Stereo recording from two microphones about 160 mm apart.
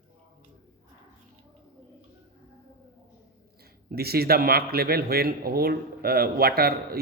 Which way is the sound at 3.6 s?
75° right (ahead or behind).